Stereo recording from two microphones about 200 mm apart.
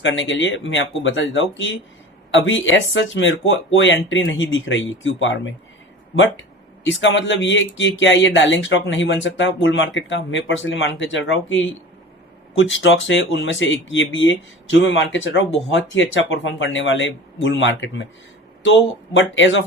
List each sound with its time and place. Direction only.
0.0 s speech: 70° left (ahead or behind)
6.8 s speech: 70° left (ahead or behind)
19.1 s speech: 70° left (ahead or behind)